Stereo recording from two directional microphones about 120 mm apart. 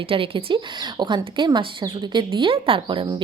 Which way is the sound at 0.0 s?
50° right (ahead or behind).